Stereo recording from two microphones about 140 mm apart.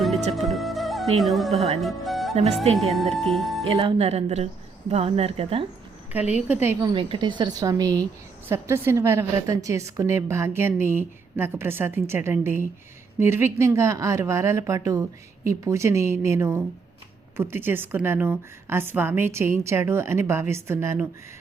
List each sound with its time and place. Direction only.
0.3 s music: centre (ahead or behind)
1.2 s speech: centre (ahead or behind)
1.5 s speech: 50° right (ahead or behind)
1.8 s music: centre (ahead or behind)
2.7 s speech: centre (ahead or behind)
3.8 s speech: 45° right (ahead or behind)
6.5 s a woman's voice: 15° right (ahead or behind)
6.7 s a woman's voice: 35° right (ahead or behind); by 21.1 s 20° right (ahead or behind)